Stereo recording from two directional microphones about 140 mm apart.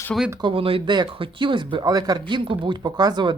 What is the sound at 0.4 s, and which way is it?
Speech, 40° right (ahead or behind).